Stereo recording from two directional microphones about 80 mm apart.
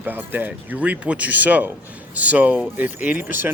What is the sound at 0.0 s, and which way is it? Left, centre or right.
Speech, right.